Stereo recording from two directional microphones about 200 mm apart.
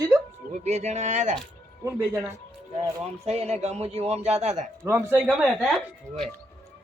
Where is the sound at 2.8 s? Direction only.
30° right (ahead or behind).